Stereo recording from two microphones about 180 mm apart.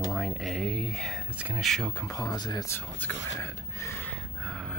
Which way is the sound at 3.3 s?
15° left (ahead or behind).